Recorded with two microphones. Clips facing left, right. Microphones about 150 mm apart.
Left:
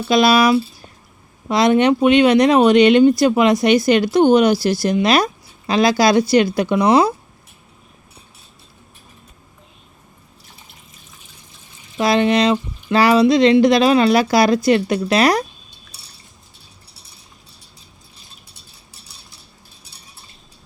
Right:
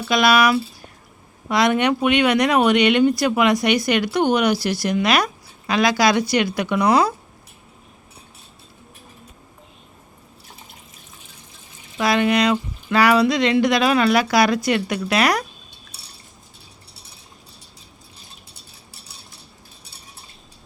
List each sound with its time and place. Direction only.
0.1 s speech: 30° left (ahead or behind)
11.9 s speech: 30° left (ahead or behind)